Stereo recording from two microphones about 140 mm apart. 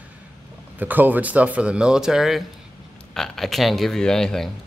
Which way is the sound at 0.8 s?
10° right (ahead or behind).